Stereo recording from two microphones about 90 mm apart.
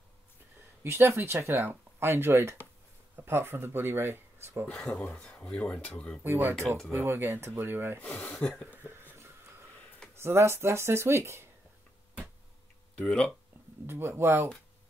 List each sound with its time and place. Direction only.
0.8 s speech: 30° right (ahead or behind)
4.6 s speech: 10° left (ahead or behind)
6.2 s speech: 25° right (ahead or behind)
8.0 s speech: 15° left (ahead or behind)
8.8 s a sound: 25° right (ahead or behind)
10.1 s speech: 30° right (ahead or behind)
12.9 s speech: 10° left (ahead or behind)
13.8 s speech: 25° right (ahead or behind)